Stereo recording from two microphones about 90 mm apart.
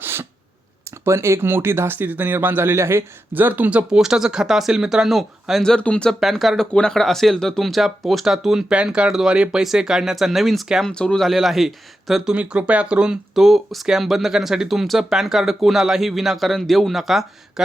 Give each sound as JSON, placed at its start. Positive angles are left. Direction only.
{"t": 0.0, "sound": "a sound", "side_deg": -25}
{"t": 0.9, "sound": "speech", "side_deg": -30}
{"t": 6.1, "sound": "speech", "side_deg": 0}